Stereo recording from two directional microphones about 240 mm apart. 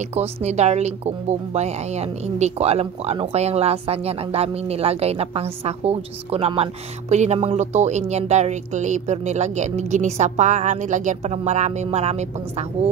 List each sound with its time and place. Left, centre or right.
0.1 s speech: right